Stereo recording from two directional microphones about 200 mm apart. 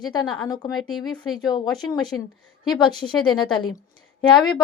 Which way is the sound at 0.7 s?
Centre (ahead or behind).